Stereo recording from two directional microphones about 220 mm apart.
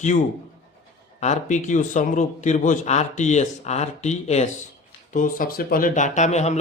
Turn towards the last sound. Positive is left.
turn(degrees=30)  # may be behind; listen again after turning